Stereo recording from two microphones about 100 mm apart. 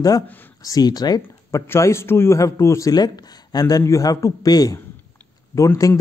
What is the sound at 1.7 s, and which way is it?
A man's voice, 25° left (ahead or behind).